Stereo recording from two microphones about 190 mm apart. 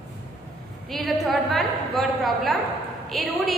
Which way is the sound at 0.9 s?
Centre (ahead or behind).